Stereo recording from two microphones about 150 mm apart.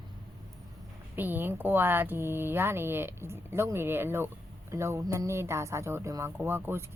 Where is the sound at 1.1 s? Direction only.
15° right (ahead or behind).